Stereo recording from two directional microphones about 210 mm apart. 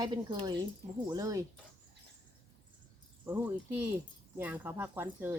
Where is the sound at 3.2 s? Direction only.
10° right (ahead or behind).